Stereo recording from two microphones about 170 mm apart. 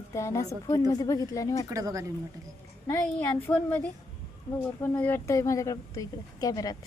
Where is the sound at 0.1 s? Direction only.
15° left (ahead or behind).